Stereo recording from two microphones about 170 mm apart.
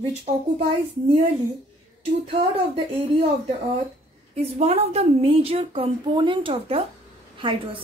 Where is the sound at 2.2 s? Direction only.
35° right (ahead or behind).